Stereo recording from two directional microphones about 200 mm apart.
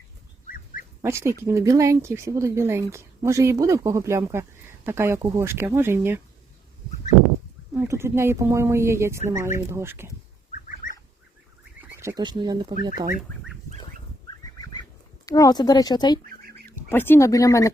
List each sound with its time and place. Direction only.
1.0 s a woman's voice: 15° right (ahead or behind)
7.7 s a woman's voice: 10° right (ahead or behind)
10.8 s fowl: 40° left (ahead or behind)
11.8 s speech: 15° right (ahead or behind)
14.3 s fowl: 20° left (ahead or behind)
15.3 s speech: 20° left (ahead or behind)
16.2 s rodents: 50° right (ahead or behind)
16.9 s speech: 10° left (ahead or behind)